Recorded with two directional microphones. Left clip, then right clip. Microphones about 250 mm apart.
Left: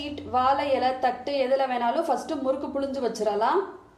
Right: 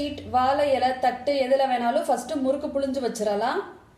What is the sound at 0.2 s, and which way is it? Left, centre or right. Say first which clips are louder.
A woman's voice: right 1 dB; centre.